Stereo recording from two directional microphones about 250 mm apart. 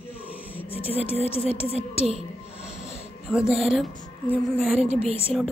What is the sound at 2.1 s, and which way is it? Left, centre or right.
Snort, left.